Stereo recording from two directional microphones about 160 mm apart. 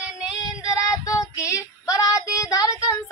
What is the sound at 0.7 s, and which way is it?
Child singing, 20° left (ahead or behind).